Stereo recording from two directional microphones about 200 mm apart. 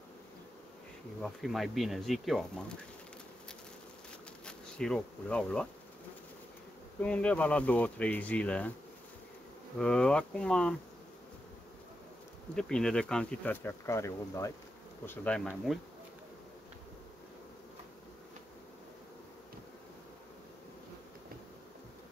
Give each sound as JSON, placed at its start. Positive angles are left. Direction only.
{"t": 1.2, "sound": "speech", "side_deg": 0}
{"t": 4.5, "sound": "speech", "side_deg": 5}
{"t": 7.0, "sound": "speech", "side_deg": 5}
{"t": 9.8, "sound": "speech", "side_deg": 5}
{"t": 12.5, "sound": "speech", "side_deg": 5}